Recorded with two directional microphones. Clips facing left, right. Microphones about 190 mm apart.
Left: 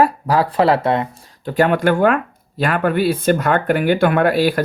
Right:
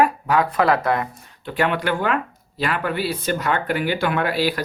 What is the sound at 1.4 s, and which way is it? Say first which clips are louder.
Speech: left 6 dB; 40° left (ahead or behind).